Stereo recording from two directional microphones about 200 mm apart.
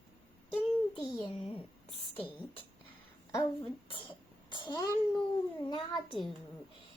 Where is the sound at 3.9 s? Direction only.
25° left (ahead or behind).